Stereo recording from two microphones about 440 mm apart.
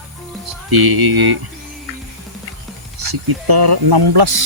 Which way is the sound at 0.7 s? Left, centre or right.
Right.